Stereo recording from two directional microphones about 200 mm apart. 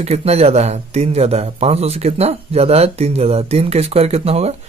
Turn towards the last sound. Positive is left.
turn(degrees=-30)  # may be behind; listen again after turning